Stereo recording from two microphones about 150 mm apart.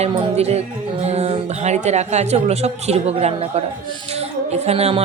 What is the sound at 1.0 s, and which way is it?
Speech, 45° right (ahead or behind).